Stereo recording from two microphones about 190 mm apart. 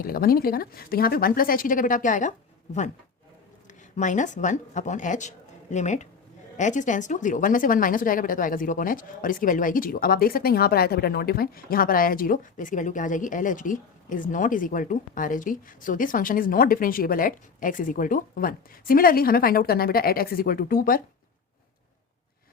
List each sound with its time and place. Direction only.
0.0 s speech: 50° left (ahead or behind)
3.9 s speech: 40° left (ahead or behind)